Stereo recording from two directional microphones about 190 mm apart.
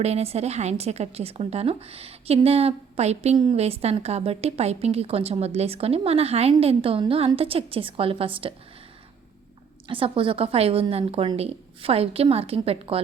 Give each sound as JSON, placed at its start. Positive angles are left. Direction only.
{"t": 0.0, "sound": "a woman's voice", "side_deg": -35}
{"t": 9.8, "sound": "a woman's voice", "side_deg": -25}